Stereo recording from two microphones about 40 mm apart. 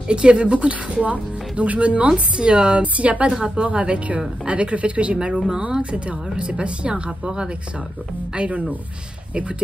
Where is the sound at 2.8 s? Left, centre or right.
Right.